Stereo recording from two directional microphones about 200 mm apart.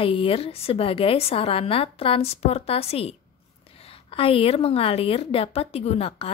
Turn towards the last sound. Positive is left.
turn(degrees=30)  # may be behind; listen again after turning